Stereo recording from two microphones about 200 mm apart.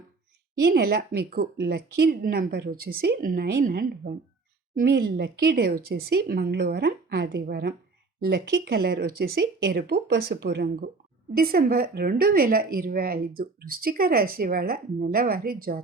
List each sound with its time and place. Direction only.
0.6 s a woman's voice: 50° right (ahead or behind)